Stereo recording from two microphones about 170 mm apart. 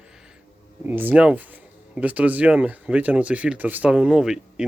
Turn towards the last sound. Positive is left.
turn(degrees=-5)  # may be behind; listen again after turning